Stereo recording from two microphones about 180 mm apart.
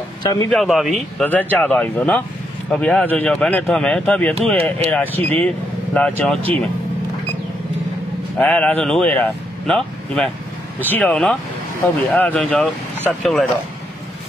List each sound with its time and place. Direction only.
0.2 s speech: 20° left (ahead or behind)
0.5 s speech: centre (ahead or behind)
8.4 s speech: 5° left (ahead or behind)